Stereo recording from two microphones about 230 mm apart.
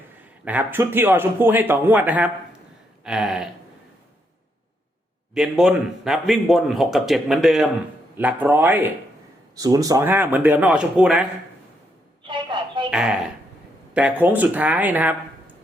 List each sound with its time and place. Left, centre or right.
0.4 s a man's voice: centre
5.3 s a man's voice: centre
12.3 s a sound: centre
12.9 s a man's voice: centre